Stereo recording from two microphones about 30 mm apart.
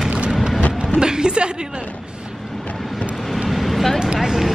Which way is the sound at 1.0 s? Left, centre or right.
Right.